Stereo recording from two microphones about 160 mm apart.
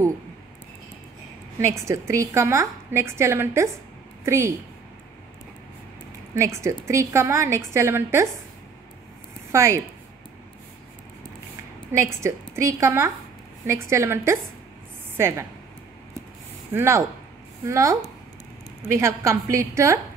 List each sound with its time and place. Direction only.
1.6 s a woman's voice: 20° right (ahead or behind)
6.3 s a woman's voice: 15° right (ahead or behind)
9.5 s speech: 20° right (ahead or behind)
12.0 s a woman's voice: 20° right (ahead or behind)
16.7 s a woman's voice: 15° right (ahead or behind)